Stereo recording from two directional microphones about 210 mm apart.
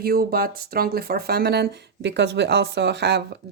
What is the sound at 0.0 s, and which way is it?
Speech, 45° right (ahead or behind).